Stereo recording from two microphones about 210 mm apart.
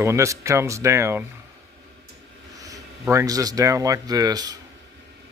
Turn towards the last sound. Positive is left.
turn(degrees=-20)  # may be behind; listen again after turning